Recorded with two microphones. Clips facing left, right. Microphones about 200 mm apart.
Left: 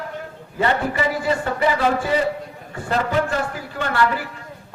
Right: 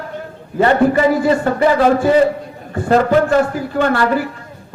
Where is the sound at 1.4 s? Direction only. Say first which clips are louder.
Right 6 dB; 50° right (ahead or behind).